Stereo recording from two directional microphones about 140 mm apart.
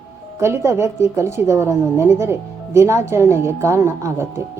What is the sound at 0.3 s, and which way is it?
A woman's voice, 20° right (ahead or behind).